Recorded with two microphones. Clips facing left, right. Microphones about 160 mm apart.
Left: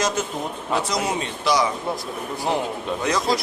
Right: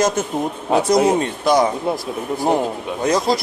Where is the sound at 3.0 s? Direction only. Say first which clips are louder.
Right 5 dB; 35° right (ahead or behind).